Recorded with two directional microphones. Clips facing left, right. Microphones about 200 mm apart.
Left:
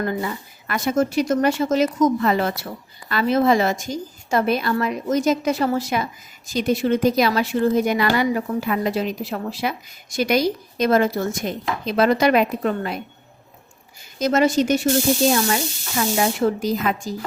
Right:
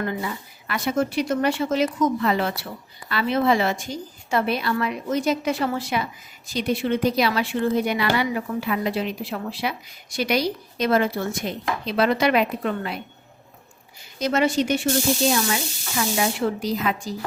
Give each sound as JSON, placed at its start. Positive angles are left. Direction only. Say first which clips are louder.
{"t": 0.0, "sound": "a woman's voice", "louder": "left 3 dB", "side_deg": 40}
{"t": 14.2, "sound": "a woman's voice", "louder": "left 3 dB", "side_deg": 45}
{"t": 16.0, "sound": "a woman's voice", "louder": "left 3 dB", "side_deg": 45}